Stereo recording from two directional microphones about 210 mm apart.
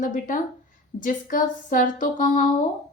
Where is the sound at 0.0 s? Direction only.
40° left (ahead or behind).